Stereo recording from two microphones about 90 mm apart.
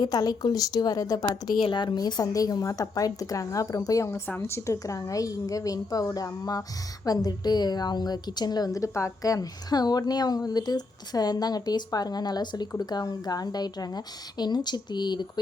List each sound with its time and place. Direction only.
0.0 s a woman's voice: 45° left (ahead or behind)
1.6 s a woman's voice: 60° left (ahead or behind)